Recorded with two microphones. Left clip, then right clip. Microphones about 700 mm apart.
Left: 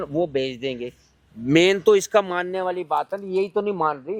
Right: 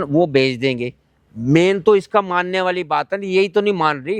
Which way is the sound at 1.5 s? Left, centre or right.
Right.